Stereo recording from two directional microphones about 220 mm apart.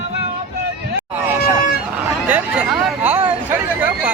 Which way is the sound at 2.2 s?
5° right (ahead or behind).